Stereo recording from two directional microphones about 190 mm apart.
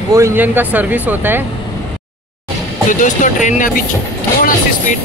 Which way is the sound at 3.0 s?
40° left (ahead or behind).